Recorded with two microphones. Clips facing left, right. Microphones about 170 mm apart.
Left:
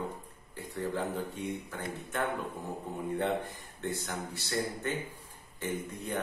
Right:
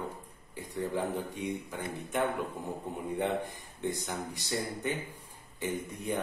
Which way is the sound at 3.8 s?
15° right (ahead or behind).